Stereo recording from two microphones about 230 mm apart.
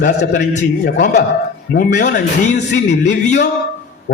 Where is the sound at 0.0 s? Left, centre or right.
Left.